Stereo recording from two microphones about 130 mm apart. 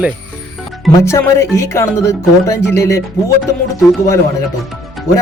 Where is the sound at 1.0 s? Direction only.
20° left (ahead or behind).